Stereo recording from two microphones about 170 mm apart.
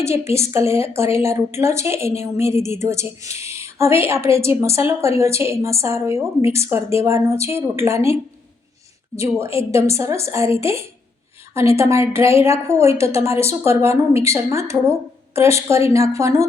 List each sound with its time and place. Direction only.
0.0 s a woman's voice: 15° right (ahead or behind)